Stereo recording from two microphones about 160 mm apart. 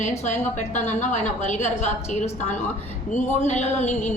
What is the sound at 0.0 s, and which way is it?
A woman's voice, 50° left (ahead or behind).